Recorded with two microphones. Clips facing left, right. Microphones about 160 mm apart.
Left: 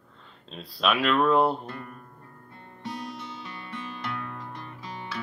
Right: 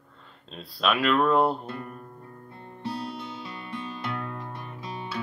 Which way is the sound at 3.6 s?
20° right (ahead or behind).